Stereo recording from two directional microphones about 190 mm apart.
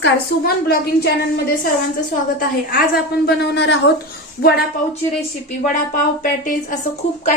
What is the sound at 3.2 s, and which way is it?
Speech, 60° left (ahead or behind).